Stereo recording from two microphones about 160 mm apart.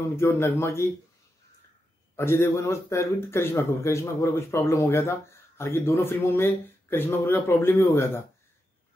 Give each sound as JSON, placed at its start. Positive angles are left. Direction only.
{"t": 0.1, "sound": "speech", "side_deg": 15}
{"t": 2.1, "sound": "speech", "side_deg": 15}